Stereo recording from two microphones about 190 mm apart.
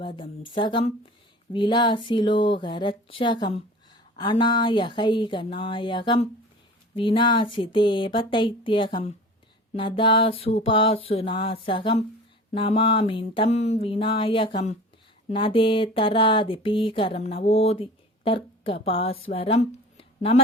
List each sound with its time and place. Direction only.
0.0 s speech: 25° left (ahead or behind)